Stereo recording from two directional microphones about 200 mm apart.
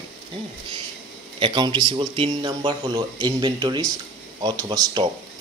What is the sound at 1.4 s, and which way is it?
Speech, 25° right (ahead or behind).